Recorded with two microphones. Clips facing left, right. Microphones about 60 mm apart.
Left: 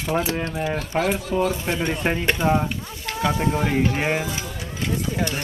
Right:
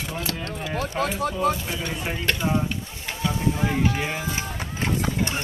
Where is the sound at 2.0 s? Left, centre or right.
Left.